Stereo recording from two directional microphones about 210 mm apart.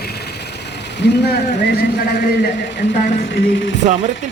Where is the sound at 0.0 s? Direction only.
50° left (ahead or behind).